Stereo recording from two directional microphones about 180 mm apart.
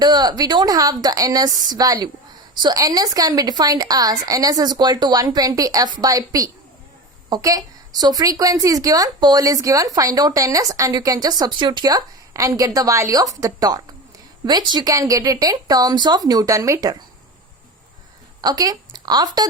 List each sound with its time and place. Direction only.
0.0 s a woman's voice: 25° right (ahead or behind)
18.4 s speech: 20° right (ahead or behind)